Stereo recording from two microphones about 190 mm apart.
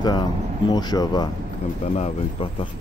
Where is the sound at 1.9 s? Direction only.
35° left (ahead or behind).